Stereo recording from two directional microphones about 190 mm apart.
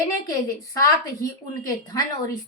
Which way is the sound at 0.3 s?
20° left (ahead or behind).